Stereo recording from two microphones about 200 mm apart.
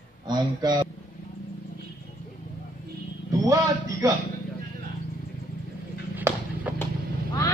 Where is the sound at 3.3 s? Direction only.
15° right (ahead or behind).